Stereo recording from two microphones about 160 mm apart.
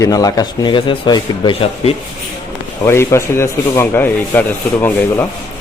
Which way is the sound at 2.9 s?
15° left (ahead or behind).